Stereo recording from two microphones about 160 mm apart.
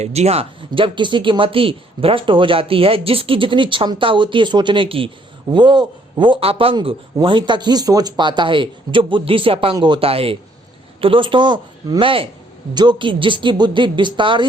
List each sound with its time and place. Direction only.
0.0 s speech: 45° right (ahead or behind)